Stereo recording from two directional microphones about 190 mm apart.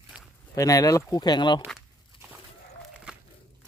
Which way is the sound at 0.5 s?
20° left (ahead or behind).